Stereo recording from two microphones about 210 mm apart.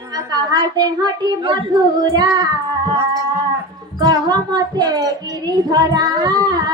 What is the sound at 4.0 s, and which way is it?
Speech, 20° right (ahead or behind).